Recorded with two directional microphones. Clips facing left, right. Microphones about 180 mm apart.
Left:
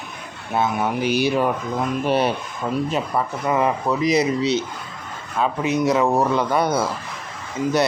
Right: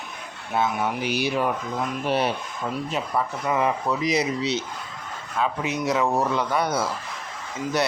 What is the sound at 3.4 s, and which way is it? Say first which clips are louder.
Speech: left 4 dB; 45° left (ahead or behind).